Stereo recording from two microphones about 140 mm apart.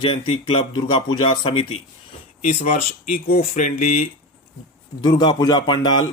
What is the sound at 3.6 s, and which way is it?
Speech, 65° left (ahead or behind).